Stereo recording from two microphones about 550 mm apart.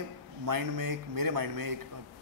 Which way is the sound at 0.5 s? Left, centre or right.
Right.